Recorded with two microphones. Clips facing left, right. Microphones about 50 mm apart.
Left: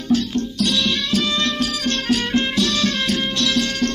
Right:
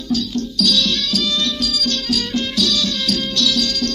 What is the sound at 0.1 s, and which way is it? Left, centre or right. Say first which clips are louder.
Music: left 2 dB; left.